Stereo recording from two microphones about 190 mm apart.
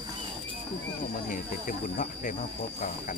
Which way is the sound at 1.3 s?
45° left (ahead or behind).